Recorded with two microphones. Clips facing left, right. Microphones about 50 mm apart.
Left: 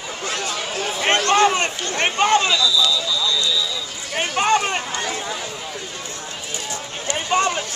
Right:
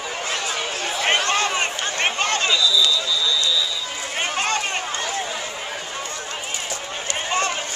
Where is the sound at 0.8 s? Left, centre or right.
Centre.